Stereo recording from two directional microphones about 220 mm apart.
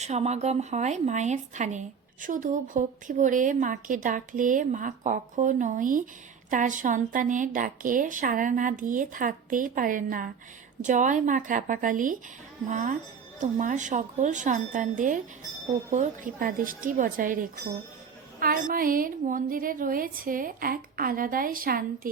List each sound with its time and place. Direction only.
0.0 s speech: 30° right (ahead or behind)